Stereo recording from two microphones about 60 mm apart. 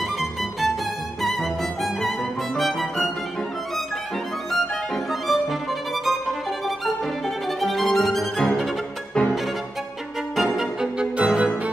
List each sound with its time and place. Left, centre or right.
0.0 s music: centre
4.5 s music: centre
10.3 s violin: centre
11.1 s music: centre